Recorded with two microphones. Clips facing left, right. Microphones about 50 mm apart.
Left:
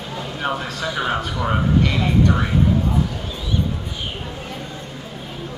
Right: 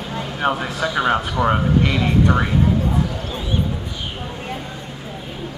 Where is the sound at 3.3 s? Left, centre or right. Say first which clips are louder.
Right 2 dB; right.